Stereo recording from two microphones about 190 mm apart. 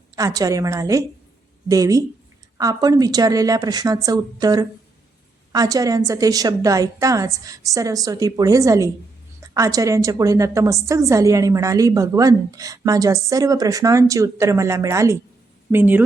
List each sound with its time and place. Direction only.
0.2 s a woman's voice: 20° right (ahead or behind)